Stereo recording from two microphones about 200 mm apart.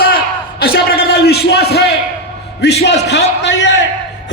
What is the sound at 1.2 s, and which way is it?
A man's voice, 55° left (ahead or behind).